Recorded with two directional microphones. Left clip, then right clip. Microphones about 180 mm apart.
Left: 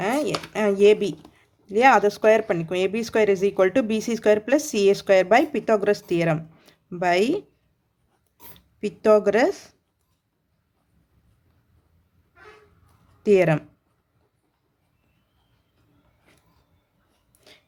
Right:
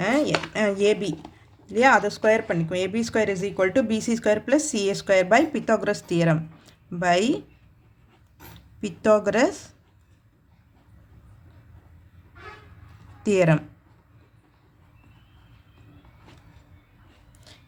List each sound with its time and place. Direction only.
0.0 s chopping: 25° left (ahead or behind)
1.6 s speech: 35° left (ahead or behind)
8.5 s speech: 30° left (ahead or behind)
13.2 s speech: 25° left (ahead or behind)
17.5 s a sound: 35° left (ahead or behind)